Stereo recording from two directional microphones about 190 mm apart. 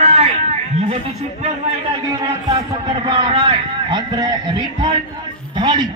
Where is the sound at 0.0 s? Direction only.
35° right (ahead or behind).